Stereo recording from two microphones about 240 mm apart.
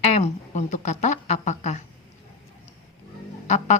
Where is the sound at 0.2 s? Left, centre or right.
Left.